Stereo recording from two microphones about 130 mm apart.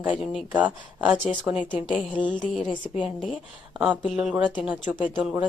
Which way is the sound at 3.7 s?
5° right (ahead or behind).